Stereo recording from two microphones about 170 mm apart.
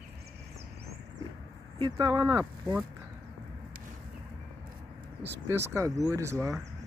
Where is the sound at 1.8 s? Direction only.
20° right (ahead or behind).